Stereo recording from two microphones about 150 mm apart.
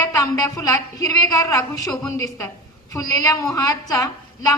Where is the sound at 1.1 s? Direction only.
20° left (ahead or behind).